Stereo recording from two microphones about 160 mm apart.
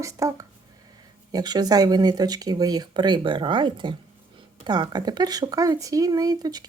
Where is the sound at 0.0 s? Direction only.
20° right (ahead or behind).